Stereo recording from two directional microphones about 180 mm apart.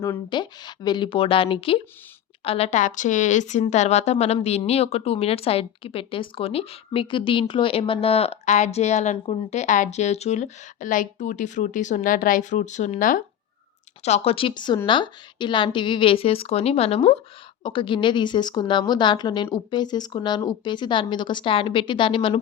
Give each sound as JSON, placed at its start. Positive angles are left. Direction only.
{"t": 0.0, "sound": "a woman's voice", "side_deg": 20}
{"t": 14.0, "sound": "a woman's voice", "side_deg": 35}